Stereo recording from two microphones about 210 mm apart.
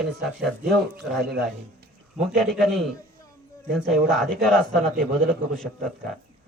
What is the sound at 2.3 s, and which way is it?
A man's voice, centre (ahead or behind).